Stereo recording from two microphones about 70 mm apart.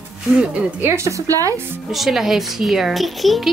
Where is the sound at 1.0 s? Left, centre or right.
Right.